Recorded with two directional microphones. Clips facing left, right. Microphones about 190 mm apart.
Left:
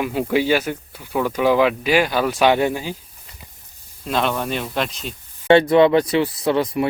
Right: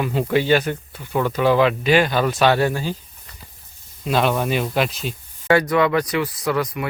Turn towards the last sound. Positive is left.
turn(degrees=30)  # may be behind; listen again after turning